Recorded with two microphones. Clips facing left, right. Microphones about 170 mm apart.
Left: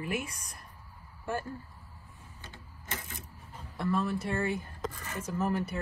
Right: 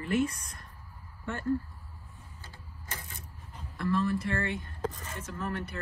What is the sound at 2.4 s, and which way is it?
Printer, 20° left (ahead or behind).